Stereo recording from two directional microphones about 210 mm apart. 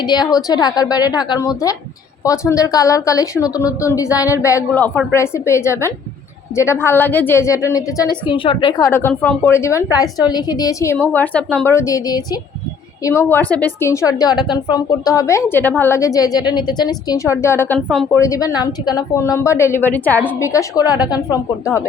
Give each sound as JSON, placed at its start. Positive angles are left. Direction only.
{"t": 0.0, "sound": "a woman's voice", "side_deg": 20}